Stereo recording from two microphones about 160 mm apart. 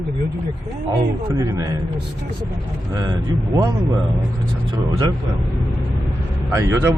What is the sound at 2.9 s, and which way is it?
Speech, 25° right (ahead or behind).